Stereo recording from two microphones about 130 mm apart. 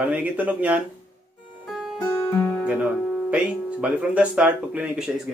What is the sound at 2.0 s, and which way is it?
Music, 25° left (ahead or behind).